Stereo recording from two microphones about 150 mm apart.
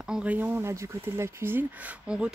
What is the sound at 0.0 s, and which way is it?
Speech, 5° right (ahead or behind).